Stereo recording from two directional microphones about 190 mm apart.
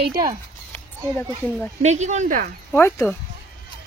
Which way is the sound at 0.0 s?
50° right (ahead or behind).